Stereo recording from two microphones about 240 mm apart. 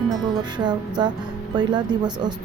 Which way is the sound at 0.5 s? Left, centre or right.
Centre.